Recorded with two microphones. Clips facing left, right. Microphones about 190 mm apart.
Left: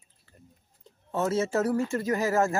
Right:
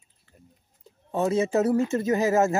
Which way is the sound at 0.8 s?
15° right (ahead or behind).